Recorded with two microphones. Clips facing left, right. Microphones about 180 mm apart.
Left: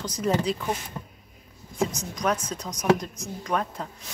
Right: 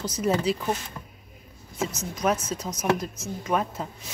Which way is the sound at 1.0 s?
15° left (ahead or behind).